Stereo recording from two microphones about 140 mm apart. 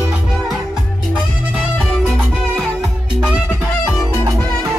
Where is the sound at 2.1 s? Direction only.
Centre (ahead or behind).